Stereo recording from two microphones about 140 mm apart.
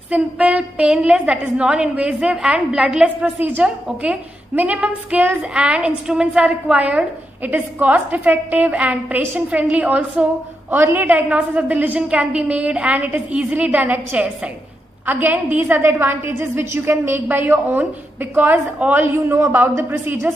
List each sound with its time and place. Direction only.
0.1 s a woman's voice: 10° right (ahead or behind)